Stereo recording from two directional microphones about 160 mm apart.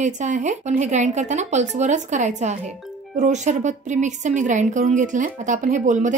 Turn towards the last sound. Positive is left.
turn(degrees=-50)  # may be behind; listen again after turning